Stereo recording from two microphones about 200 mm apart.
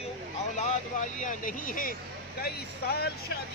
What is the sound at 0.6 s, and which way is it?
Speech, 40° left (ahead or behind).